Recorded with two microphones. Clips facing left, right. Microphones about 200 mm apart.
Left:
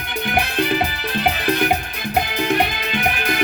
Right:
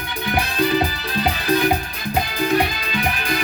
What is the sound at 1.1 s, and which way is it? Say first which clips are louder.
Music: even; 60° left (ahead or behind).